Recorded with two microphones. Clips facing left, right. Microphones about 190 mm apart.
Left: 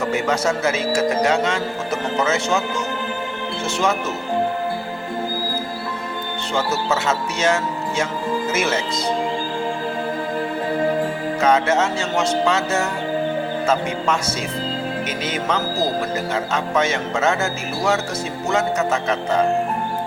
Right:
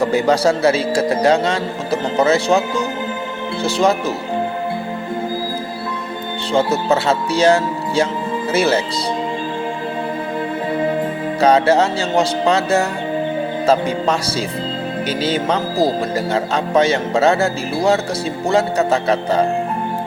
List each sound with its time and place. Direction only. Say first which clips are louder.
0.0 s speech: right 6 dB; 35° right (ahead or behind)
6.5 s speech: right 6 dB; 30° right (ahead or behind)
11.3 s speech: right 5 dB; 35° right (ahead or behind)
15.2 s speech: right 5 dB; 30° right (ahead or behind)